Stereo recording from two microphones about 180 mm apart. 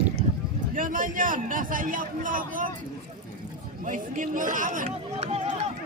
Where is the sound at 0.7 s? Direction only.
50° right (ahead or behind).